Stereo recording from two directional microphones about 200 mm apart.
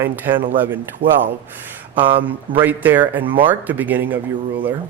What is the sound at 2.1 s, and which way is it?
Speech, 10° right (ahead or behind).